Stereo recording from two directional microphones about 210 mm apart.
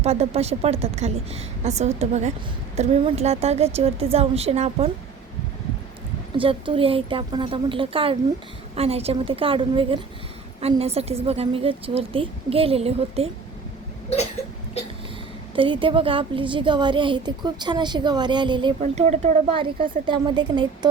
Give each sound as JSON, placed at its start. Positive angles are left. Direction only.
{"t": 0.0, "sound": "a woman's voice", "side_deg": -30}
{"t": 6.3, "sound": "a woman's voice", "side_deg": -25}
{"t": 14.4, "sound": "a sound", "side_deg": 30}
{"t": 15.5, "sound": "a woman's voice", "side_deg": -25}